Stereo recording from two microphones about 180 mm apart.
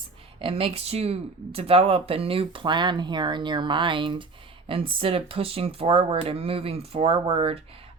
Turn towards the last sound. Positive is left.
turn(degrees=-30)  # may be behind; listen again after turning